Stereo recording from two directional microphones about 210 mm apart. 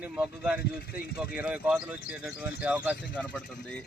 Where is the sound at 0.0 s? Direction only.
5° right (ahead or behind).